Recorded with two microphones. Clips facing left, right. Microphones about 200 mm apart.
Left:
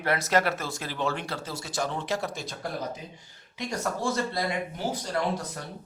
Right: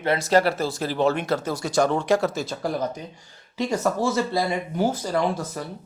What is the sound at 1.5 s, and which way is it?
Speech, 65° right (ahead or behind).